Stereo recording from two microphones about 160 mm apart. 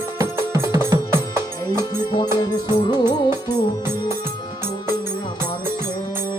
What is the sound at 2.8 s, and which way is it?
Music, 25° left (ahead or behind).